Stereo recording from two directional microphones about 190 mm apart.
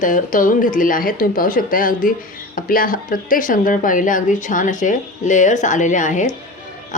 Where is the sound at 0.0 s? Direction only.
45° left (ahead or behind).